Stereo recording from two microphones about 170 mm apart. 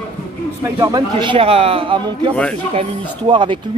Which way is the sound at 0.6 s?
20° right (ahead or behind).